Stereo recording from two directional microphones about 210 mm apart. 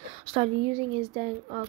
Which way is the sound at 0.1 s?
30° right (ahead or behind).